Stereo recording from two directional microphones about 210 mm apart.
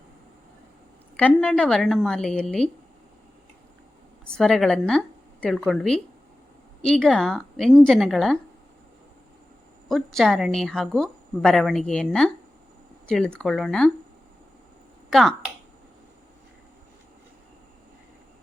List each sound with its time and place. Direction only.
1.1 s a woman's voice: 5° left (ahead or behind)
4.3 s a woman's voice: centre (ahead or behind)
9.9 s a woman's voice: centre (ahead or behind)
15.1 s speech: centre (ahead or behind)